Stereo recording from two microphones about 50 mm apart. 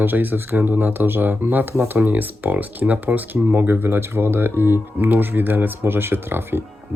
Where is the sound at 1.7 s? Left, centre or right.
Right.